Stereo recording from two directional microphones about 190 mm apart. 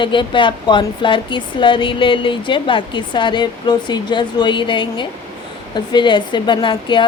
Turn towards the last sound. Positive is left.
turn(degrees=25)  # may be behind; listen again after turning